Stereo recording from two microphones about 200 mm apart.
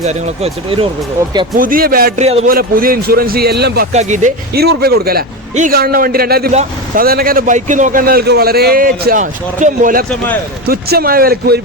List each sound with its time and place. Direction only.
0.0 s speech: 35° right (ahead or behind)
1.5 s a man's voice: 45° right (ahead or behind)
2.2 s speech: 30° right (ahead or behind)
2.5 s a man's voice: 45° right (ahead or behind)
3.9 s speech: 35° right (ahead or behind)
4.5 s a man's voice: 50° right (ahead or behind)
6.5 s speech: 35° right (ahead or behind)
7.0 s a man's voice: 50° right (ahead or behind)